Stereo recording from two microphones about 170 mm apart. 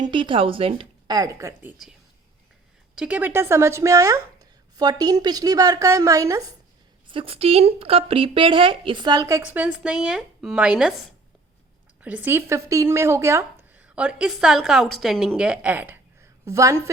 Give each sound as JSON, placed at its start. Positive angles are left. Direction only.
{"t": 0.0, "sound": "speech", "side_deg": -30}
{"t": 2.9, "sound": "speech", "side_deg": -5}
{"t": 7.1, "sound": "speech", "side_deg": -35}
{"t": 13.8, "sound": "a woman's voice", "side_deg": -5}